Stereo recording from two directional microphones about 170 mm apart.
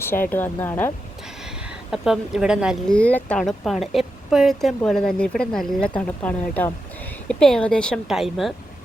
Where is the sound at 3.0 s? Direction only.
10° left (ahead or behind).